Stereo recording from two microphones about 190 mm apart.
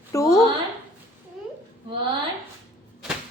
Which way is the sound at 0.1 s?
15° left (ahead or behind).